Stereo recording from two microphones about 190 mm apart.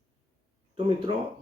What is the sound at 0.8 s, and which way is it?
Speech, 25° right (ahead or behind).